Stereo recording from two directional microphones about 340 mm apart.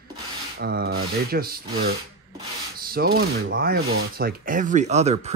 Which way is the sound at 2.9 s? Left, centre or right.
Right.